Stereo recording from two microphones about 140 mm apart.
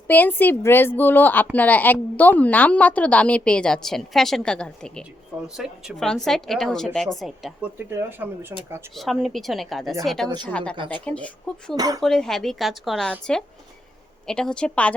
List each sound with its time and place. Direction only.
0.1 s a woman's voice: 15° left (ahead or behind)
8.5 s speech: 20° right (ahead or behind)
9.0 s a woman's voice: centre (ahead or behind)
10.2 s speech: 30° right (ahead or behind)
10.5 s a woman's voice: 10° left (ahead or behind)
11.7 s speech: 25° right (ahead or behind)
12.0 s a woman's voice: 5° left (ahead or behind)